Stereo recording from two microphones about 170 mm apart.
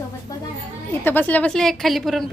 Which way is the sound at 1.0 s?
10° left (ahead or behind).